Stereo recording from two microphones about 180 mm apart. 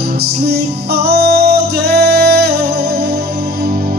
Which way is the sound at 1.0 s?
60° right (ahead or behind).